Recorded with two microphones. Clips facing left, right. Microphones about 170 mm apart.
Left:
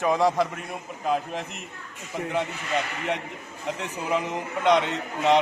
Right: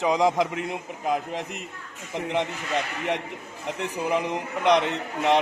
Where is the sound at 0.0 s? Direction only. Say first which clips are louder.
Even; 15° right (ahead or behind).